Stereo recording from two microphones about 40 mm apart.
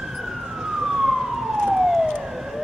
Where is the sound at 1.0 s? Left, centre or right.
Centre.